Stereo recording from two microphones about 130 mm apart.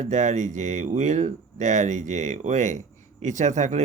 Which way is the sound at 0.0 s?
65° right (ahead or behind).